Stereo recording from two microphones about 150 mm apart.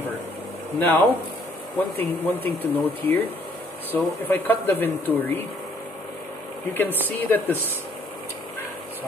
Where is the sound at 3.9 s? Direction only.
15° left (ahead or behind).